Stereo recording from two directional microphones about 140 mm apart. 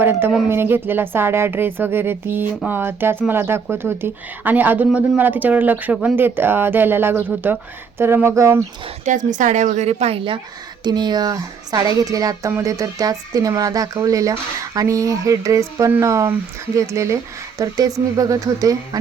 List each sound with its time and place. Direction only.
0.0 s speech: 15° right (ahead or behind)
9.0 s a woman's voice: 65° right (ahead or behind); by 18.8 s 25° right (ahead or behind)